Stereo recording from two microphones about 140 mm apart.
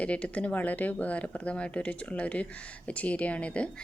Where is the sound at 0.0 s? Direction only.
10° left (ahead or behind).